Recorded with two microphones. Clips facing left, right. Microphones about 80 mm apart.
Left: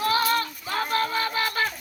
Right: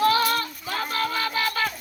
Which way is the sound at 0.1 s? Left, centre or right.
Left.